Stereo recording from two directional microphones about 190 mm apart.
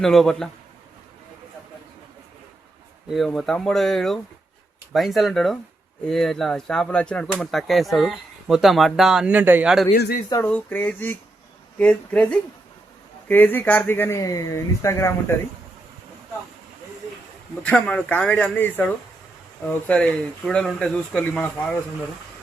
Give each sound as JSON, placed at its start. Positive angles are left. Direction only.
{"t": 0.0, "sound": "speech", "side_deg": 0}
{"t": 3.1, "sound": "speech", "side_deg": 0}
{"t": 9.9, "sound": "speech", "side_deg": 55}
{"t": 10.4, "sound": "speech", "side_deg": 10}
{"t": 17.6, "sound": "speech", "side_deg": 5}